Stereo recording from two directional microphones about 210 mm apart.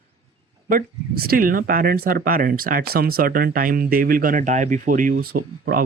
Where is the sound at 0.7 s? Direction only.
45° right (ahead or behind).